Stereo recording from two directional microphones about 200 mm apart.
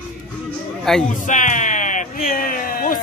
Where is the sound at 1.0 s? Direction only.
40° left (ahead or behind).